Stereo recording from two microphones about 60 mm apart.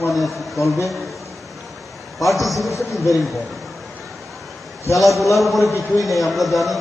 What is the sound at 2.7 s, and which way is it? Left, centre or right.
Speech, left.